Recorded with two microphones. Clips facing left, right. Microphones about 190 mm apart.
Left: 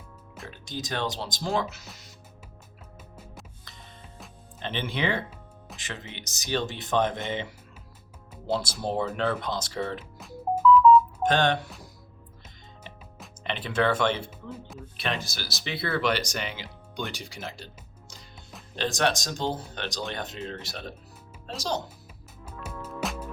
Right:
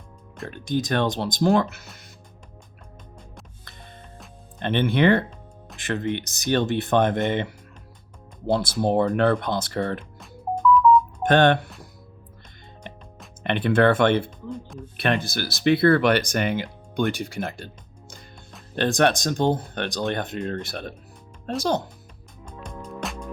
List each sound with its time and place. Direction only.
0.5 s speech: 60° right (ahead or behind)
4.6 s speech: 60° right (ahead or behind)
10.0 s music: 5° left (ahead or behind)
11.2 s speech: 55° right (ahead or behind)
12.9 s music: 55° right (ahead or behind)
13.4 s speech: 55° right (ahead or behind)
14.3 s speech: 5° left (ahead or behind)
14.9 s speech: 55° right (ahead or behind)
18.8 s speech: 55° right (ahead or behind)
22.6 s music: 5° left (ahead or behind)